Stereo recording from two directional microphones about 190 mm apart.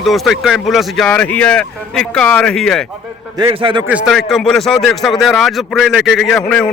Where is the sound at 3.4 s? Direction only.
25° right (ahead or behind).